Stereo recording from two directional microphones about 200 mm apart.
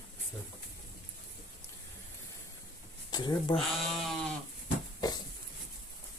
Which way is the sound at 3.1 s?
20° left (ahead or behind).